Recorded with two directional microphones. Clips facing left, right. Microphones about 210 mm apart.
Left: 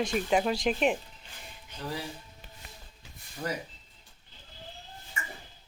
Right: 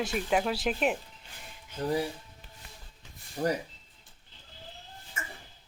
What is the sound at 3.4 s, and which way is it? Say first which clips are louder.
Speech: right 6 dB; 40° right (ahead or behind).